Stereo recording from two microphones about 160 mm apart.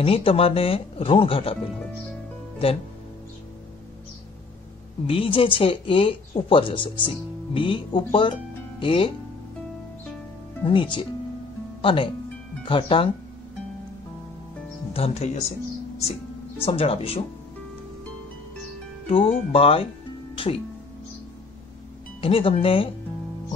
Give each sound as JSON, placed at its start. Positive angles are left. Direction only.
{"t": 0.0, "sound": "speech", "side_deg": 35}
{"t": 5.0, "sound": "speech", "side_deg": 35}
{"t": 10.6, "sound": "speech", "side_deg": 30}
{"t": 14.9, "sound": "speech", "side_deg": 40}
{"t": 16.6, "sound": "speech", "side_deg": 35}
{"t": 19.0, "sound": "speech", "side_deg": 35}
{"t": 20.3, "sound": "music", "side_deg": 35}
{"t": 22.2, "sound": "speech", "side_deg": 35}